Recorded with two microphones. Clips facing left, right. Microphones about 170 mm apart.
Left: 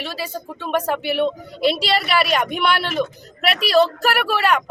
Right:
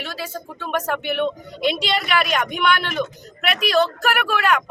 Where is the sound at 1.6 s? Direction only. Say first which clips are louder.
Left 3 dB; 35° left (ahead or behind).